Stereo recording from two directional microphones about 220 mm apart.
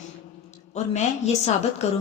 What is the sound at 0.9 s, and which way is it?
Speech, 30° left (ahead or behind).